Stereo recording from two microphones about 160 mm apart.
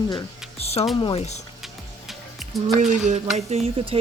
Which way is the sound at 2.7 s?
50° right (ahead or behind).